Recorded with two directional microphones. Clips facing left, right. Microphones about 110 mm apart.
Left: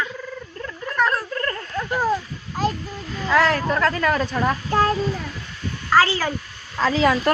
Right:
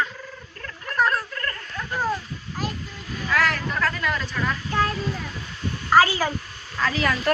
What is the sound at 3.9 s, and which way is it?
A woman's voice, 45° left (ahead or behind).